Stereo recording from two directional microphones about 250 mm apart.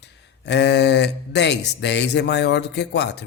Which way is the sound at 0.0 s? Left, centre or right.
Left.